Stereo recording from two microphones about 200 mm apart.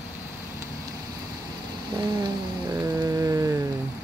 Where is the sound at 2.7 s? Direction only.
15° right (ahead or behind).